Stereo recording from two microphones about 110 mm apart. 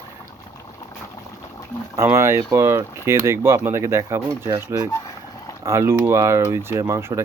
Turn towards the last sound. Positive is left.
turn(degrees=-30)  # may be behind; listen again after turning